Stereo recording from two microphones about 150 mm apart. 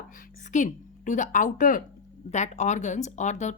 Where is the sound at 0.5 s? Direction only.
55° left (ahead or behind).